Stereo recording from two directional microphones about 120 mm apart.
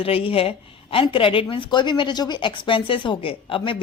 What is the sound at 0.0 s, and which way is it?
A woman's voice, 50° left (ahead or behind).